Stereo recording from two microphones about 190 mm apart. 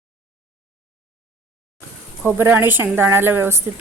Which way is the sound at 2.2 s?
10° right (ahead or behind).